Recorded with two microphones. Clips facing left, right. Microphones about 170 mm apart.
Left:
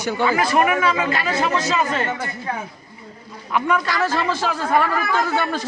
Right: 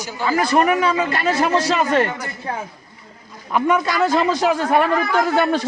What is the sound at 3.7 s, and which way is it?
A man's voice, 15° right (ahead or behind).